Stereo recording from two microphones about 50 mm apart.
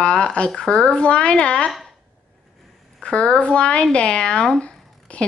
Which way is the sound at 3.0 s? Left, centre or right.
Left.